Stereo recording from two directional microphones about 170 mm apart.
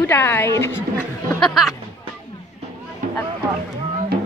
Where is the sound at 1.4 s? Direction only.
Centre (ahead or behind).